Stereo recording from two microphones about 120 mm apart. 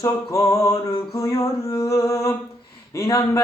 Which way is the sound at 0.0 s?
25° left (ahead or behind).